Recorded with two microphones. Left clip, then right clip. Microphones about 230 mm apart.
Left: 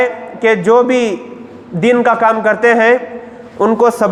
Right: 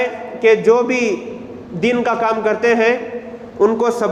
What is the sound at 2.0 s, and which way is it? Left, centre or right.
Speech, left.